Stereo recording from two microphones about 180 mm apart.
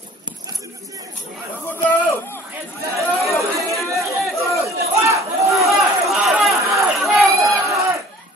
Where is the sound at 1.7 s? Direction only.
10° left (ahead or behind).